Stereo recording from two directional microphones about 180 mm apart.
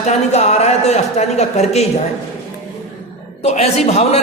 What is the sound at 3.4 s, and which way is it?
Speech, 35° left (ahead or behind).